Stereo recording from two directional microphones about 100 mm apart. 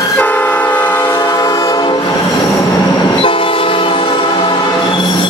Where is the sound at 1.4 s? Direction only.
35° left (ahead or behind).